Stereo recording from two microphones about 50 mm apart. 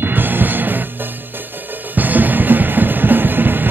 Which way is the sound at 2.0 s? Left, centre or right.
Right.